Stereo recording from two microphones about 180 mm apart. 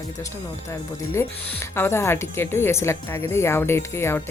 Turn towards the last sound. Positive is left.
turn(degrees=15)  # may be behind; listen again after turning